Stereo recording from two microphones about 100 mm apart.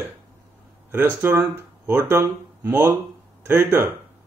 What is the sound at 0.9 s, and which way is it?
Speech, 20° right (ahead or behind).